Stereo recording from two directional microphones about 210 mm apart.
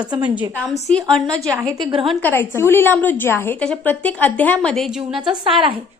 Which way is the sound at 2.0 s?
10° left (ahead or behind).